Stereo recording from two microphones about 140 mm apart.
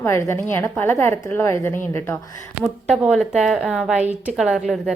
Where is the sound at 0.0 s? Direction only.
20° left (ahead or behind).